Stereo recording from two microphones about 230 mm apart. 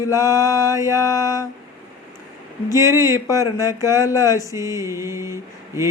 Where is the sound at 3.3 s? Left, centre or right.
Centre.